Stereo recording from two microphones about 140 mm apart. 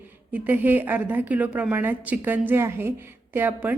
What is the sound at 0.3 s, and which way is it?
A woman's voice, 10° right (ahead or behind).